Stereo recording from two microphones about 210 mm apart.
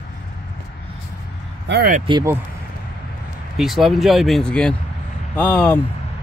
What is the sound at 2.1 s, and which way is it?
Speech, 20° right (ahead or behind).